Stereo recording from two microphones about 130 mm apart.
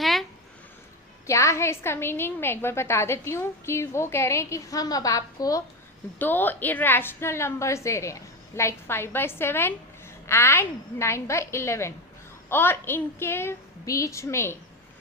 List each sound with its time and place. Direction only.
0.0 s a sound: centre (ahead or behind)
1.3 s a woman's voice: 25° left (ahead or behind)
6.1 s a woman's voice: 15° left (ahead or behind)